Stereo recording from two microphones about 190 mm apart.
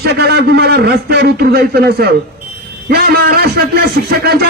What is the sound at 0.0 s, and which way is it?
Speech, 55° right (ahead or behind).